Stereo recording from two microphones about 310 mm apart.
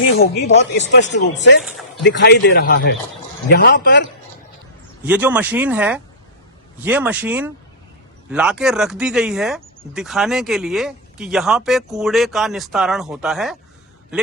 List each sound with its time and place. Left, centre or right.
0.2 s speech: left
2.0 s speech: left
5.0 s speech: centre